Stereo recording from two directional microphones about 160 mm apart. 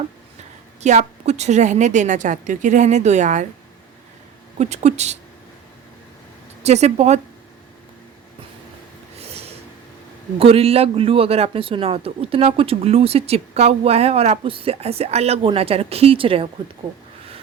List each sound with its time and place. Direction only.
0.8 s a woman's voice: 45° right (ahead or behind)
4.5 s a woman's voice: 45° right (ahead or behind)
6.6 s a woman's voice: 45° right (ahead or behind)
9.2 s snort: 40° right (ahead or behind)
10.3 s speech: 35° right (ahead or behind)